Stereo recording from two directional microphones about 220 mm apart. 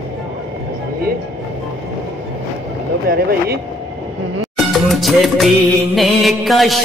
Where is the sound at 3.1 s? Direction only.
40° right (ahead or behind).